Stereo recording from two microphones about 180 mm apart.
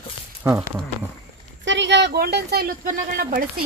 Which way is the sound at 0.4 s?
10° right (ahead or behind).